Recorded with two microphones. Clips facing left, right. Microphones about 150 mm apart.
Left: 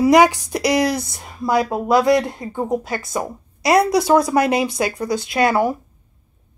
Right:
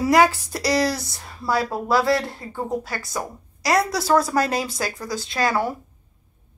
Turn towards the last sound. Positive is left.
turn(degrees=15)  # may be behind; listen again after turning